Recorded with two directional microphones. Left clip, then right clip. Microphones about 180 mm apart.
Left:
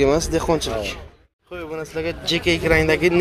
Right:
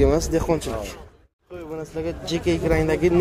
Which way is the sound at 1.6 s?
Centre (ahead or behind).